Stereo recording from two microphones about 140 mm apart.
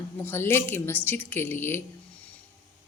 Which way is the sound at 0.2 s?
15° left (ahead or behind).